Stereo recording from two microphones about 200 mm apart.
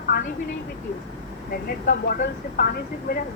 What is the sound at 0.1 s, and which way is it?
Vehicle, 50° left (ahead or behind).